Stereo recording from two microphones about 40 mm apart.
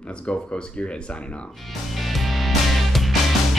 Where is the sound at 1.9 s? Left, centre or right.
Centre.